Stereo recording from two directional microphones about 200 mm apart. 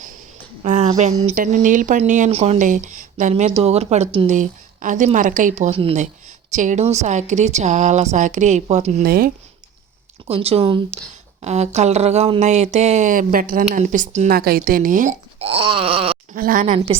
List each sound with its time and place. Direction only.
0.6 s a sound: 35° right (ahead or behind)
1.2 s speech: 35° right (ahead or behind)
9.0 s speech: 45° right (ahead or behind)
10.2 s speech: 30° right (ahead or behind)
16.3 s speech: 45° right (ahead or behind)